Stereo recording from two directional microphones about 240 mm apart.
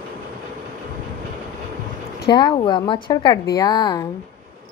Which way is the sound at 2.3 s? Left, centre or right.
Centre.